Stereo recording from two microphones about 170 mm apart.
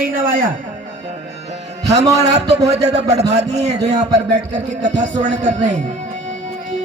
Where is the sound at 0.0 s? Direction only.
55° right (ahead or behind).